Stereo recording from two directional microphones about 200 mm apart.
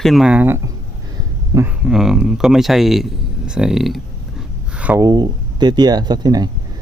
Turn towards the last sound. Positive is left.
turn(degrees=-20)  # may be behind; listen again after turning